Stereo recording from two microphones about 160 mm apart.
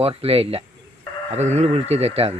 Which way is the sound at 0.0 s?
35° right (ahead or behind).